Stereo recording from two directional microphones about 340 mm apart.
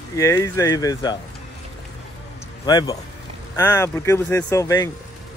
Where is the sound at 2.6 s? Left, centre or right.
Centre.